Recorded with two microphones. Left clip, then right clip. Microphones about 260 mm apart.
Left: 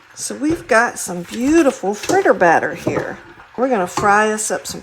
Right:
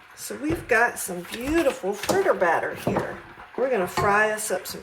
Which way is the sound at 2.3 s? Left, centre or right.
Left.